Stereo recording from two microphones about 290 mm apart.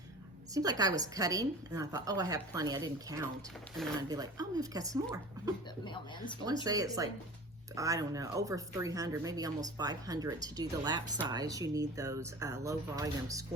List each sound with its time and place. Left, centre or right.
0.5 s speech: centre
5.8 s speech: centre
6.7 s speech: centre